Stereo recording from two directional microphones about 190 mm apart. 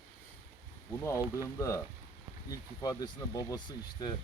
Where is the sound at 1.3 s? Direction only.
15° left (ahead or behind).